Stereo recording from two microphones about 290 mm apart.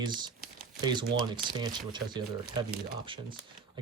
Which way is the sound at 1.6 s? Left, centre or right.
Centre.